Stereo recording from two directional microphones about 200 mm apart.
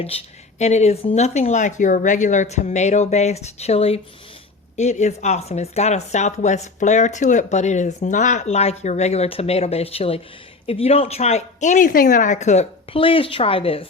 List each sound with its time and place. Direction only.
0.6 s speech: 35° left (ahead or behind)